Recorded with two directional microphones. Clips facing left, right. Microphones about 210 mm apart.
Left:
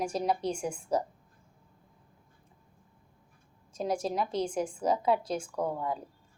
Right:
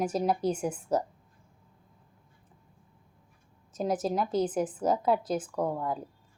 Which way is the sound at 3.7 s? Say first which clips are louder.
Right 2 dB; 5° right (ahead or behind).